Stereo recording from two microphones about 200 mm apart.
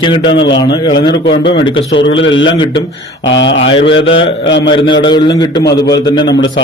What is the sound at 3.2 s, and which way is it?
Mantra, 70° left (ahead or behind).